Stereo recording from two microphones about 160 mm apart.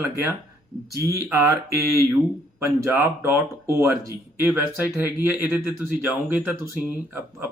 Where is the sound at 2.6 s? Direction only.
15° right (ahead or behind).